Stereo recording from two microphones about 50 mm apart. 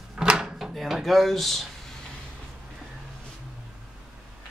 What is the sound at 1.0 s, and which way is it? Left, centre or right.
Speech, centre.